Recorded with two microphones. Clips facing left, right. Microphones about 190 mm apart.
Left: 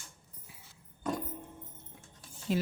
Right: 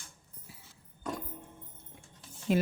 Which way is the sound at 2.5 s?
60° right (ahead or behind).